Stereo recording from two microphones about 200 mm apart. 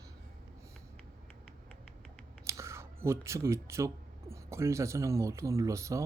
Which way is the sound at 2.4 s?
15° right (ahead or behind).